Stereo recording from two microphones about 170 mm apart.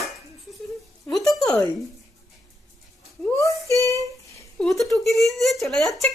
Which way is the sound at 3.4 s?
20° left (ahead or behind).